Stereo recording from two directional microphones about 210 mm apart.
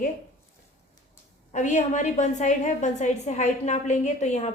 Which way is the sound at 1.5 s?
35° left (ahead or behind).